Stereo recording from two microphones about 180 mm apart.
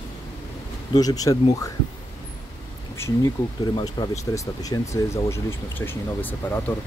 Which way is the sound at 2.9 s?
15° left (ahead or behind).